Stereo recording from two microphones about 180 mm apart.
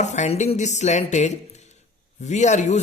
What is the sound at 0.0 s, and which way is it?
Speech, 40° left (ahead or behind).